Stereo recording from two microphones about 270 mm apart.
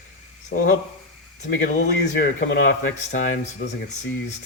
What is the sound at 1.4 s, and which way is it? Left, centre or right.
Speech, left.